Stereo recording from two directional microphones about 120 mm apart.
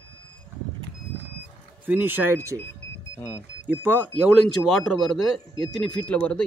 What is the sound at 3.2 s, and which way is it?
Speech, 20° left (ahead or behind).